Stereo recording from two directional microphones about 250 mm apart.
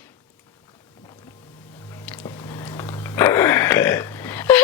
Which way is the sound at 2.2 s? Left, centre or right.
Centre.